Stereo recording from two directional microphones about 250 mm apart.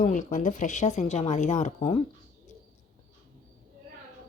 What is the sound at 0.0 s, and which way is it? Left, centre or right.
Speech, left.